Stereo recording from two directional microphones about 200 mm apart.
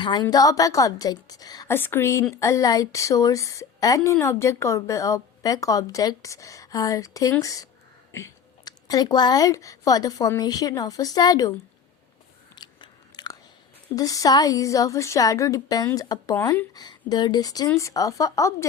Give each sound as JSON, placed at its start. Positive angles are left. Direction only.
{"t": 0.0, "sound": "a woman's voice", "side_deg": 20}
{"t": 12.5, "sound": "biting", "side_deg": 20}
{"t": 13.9, "sound": "a woman's voice", "side_deg": 20}